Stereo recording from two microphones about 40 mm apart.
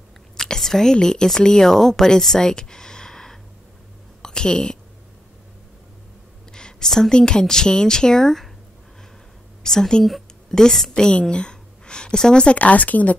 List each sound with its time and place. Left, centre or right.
0.4 s whispering: centre
1.0 s a woman's voice: centre
4.2 s a sound: centre
6.5 s a woman's voice: centre
9.6 s a woman's voice: centre
10.0 s a sound: centre
10.6 s a woman's voice: centre
11.1 s a sound: left
12.4 s speech: left